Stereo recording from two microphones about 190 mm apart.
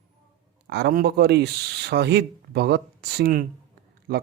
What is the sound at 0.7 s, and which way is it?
Speech, 55° right (ahead or behind).